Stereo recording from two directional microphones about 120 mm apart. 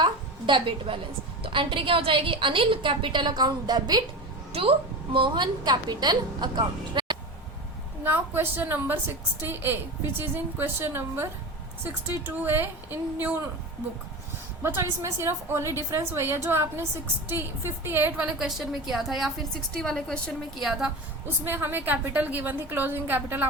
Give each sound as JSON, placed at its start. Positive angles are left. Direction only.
{"t": 0.0, "sound": "a woman's voice", "side_deg": -40}
{"t": 4.5, "sound": "a woman's voice", "side_deg": -50}
{"t": 8.0, "sound": "a woman's voice", "side_deg": -20}
{"t": 14.6, "sound": "a woman's voice", "side_deg": -20}
{"t": 21.2, "sound": "a woman's voice", "side_deg": -20}